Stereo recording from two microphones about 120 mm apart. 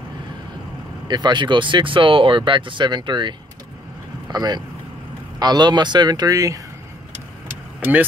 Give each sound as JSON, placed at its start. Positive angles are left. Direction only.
{"t": 1.0, "sound": "speech", "side_deg": -40}